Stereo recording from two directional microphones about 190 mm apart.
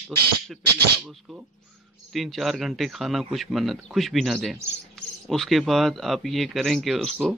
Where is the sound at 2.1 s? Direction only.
Centre (ahead or behind).